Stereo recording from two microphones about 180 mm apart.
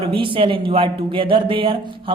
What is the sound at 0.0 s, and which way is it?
A man's voice, 30° right (ahead or behind).